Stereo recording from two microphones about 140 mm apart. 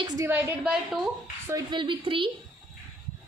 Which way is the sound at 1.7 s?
35° right (ahead or behind).